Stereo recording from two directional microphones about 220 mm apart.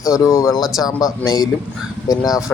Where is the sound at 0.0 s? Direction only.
15° left (ahead or behind).